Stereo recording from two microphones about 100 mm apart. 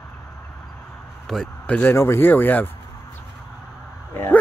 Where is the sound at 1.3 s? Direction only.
5° left (ahead or behind).